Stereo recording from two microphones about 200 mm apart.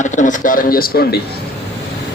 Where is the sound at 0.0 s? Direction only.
40° left (ahead or behind).